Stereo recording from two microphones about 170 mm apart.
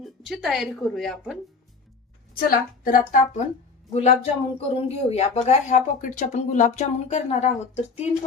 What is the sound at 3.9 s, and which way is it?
Speech, 40° left (ahead or behind).